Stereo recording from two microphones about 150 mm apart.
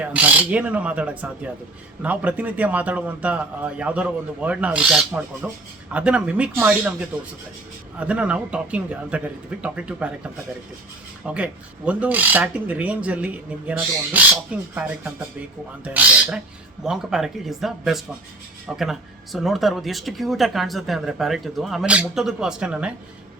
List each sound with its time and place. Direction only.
0.0 s speech: 10° right (ahead or behind)
7.9 s speech: 10° right (ahead or behind)
11.3 s speech: 10° right (ahead or behind)